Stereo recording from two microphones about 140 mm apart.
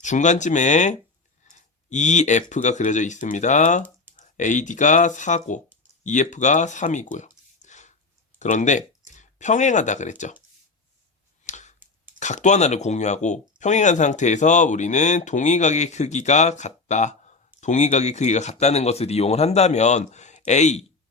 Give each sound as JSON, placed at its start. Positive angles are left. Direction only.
{"t": 0.0, "sound": "speech", "side_deg": 60}
{"t": 11.4, "sound": "clicking", "side_deg": 60}
{"t": 12.2, "sound": "speech", "side_deg": 60}